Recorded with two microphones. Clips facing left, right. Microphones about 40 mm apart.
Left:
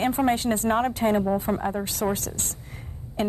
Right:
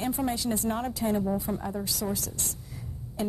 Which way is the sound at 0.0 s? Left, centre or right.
Left.